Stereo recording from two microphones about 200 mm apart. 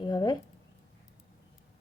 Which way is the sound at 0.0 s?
20° left (ahead or behind).